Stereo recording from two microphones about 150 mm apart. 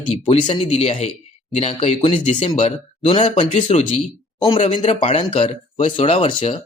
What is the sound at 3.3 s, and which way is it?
Speech, 45° left (ahead or behind).